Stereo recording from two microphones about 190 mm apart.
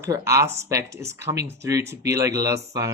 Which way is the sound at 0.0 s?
15° right (ahead or behind).